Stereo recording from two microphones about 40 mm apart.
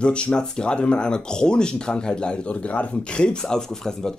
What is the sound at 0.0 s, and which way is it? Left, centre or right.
Speech, left.